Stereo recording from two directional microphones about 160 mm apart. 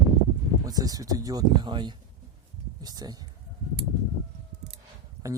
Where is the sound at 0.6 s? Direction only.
25° right (ahead or behind).